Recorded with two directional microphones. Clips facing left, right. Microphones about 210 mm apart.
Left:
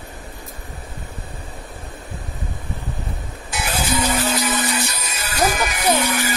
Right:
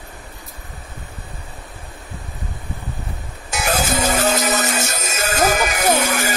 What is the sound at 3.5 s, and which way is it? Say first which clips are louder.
Music: right 3 dB; 45° right (ahead or behind).